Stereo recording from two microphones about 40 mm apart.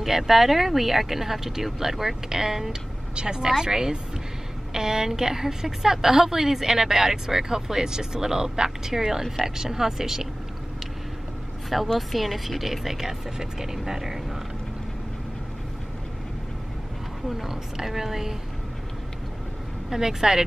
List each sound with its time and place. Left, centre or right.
0.0 s a woman's voice: centre
11.9 s a woman's voice: centre
17.4 s a woman's voice: centre
19.9 s a woman's voice: centre